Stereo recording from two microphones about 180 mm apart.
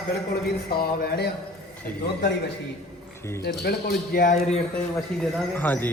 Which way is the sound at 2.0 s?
70° left (ahead or behind).